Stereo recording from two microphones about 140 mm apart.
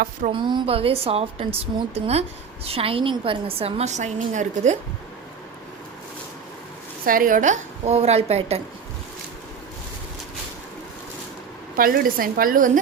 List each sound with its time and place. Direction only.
0.3 s a woman's voice: 35° right (ahead or behind); by 4.8 s 60° right (ahead or behind)
7.0 s a woman's voice: 85° right; by 8.6 s 45° right (ahead or behind)
11.8 s a woman's voice: 90° right